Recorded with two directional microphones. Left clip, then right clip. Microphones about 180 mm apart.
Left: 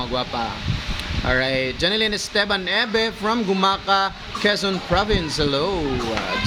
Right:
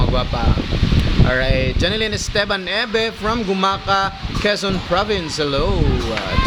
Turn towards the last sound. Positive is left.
turn(degrees=-5)  # may be behind; listen again after turning